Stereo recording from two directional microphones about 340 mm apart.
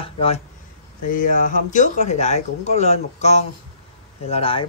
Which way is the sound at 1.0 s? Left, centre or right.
Left.